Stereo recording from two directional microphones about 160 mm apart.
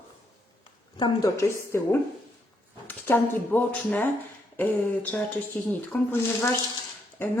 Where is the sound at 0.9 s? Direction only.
25° left (ahead or behind).